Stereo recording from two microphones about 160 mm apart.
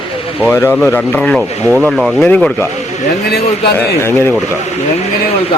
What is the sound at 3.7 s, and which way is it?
Speech, 15° left (ahead or behind).